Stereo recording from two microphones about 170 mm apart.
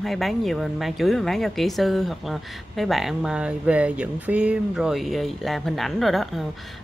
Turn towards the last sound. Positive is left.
turn(degrees=0)  # may be behind; listen again after turning